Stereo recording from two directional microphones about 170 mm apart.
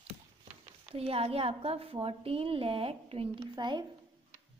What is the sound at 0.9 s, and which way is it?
A woman's voice, 35° right (ahead or behind).